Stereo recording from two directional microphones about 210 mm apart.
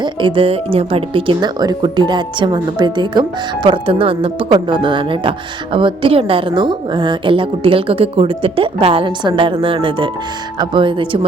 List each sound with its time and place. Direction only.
0.0 s speech: 20° right (ahead or behind)